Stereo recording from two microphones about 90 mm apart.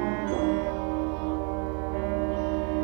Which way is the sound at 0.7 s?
10° right (ahead or behind).